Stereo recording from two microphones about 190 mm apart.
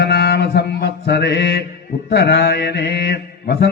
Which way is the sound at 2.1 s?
60° left (ahead or behind).